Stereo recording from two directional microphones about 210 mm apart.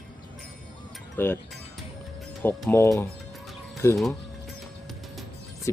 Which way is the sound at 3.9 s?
Centre (ahead or behind).